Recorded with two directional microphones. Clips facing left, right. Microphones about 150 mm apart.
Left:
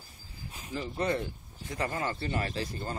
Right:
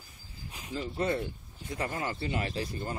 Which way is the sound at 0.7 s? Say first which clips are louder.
Even; 20° left (ahead or behind).